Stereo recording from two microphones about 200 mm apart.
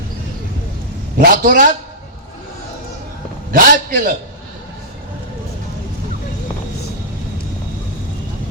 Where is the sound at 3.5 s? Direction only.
45° right (ahead or behind).